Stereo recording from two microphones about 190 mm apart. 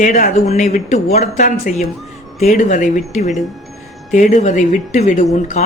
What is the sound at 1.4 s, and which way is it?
A man's voice, 50° left (ahead or behind).